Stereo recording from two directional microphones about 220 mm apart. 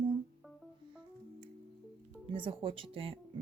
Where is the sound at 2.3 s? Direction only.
25° right (ahead or behind).